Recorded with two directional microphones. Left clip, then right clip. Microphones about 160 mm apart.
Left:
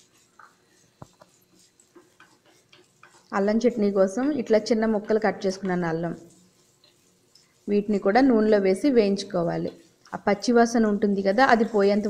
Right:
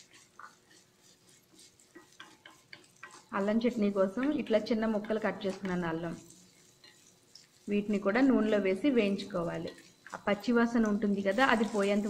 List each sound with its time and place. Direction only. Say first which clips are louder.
3.3 s a woman's voice: left 9 dB; 45° left (ahead or behind)
7.6 s a woman's voice: left 9 dB; 40° left (ahead or behind)
9.4 s a woman's voice: left 9 dB; 35° left (ahead or behind)